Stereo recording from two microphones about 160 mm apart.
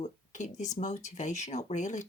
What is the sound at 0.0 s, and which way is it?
Speech, 50° left (ahead or behind).